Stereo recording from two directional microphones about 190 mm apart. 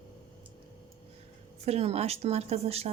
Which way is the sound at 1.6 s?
35° right (ahead or behind).